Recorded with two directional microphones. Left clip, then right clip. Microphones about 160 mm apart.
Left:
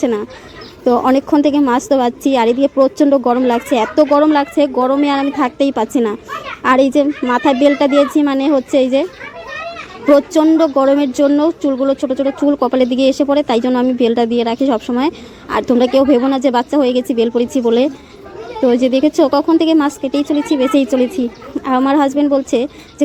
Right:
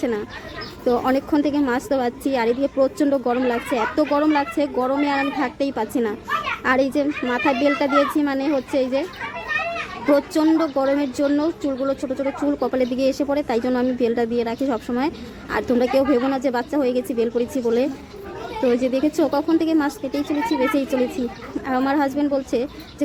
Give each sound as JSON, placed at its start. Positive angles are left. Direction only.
{"t": 0.0, "sound": "speech", "side_deg": 25}
{"t": 10.1, "sound": "speech", "side_deg": 25}